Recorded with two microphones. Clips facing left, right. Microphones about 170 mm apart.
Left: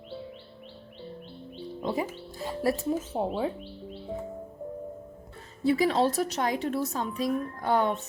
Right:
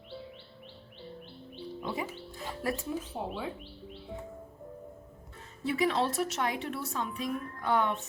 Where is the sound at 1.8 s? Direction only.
40° left (ahead or behind).